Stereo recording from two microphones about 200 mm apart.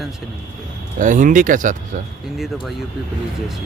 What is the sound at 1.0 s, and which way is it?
Speech, 40° right (ahead or behind).